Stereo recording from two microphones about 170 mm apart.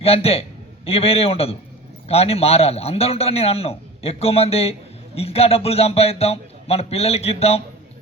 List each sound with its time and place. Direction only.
0.0 s a man's voice: 35° left (ahead or behind)